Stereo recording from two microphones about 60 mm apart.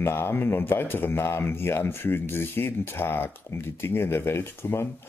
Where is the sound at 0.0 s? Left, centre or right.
Left.